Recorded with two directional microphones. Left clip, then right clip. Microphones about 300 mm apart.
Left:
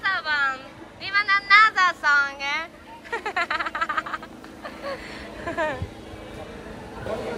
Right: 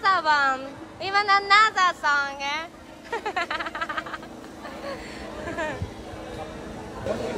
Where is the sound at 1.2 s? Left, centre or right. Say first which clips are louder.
Left 2 dB; centre.